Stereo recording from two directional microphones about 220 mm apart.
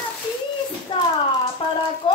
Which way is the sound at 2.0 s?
25° left (ahead or behind).